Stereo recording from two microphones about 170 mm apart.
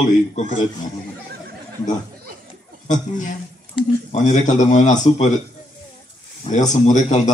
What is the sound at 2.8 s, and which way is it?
Speech, 50° left (ahead or behind).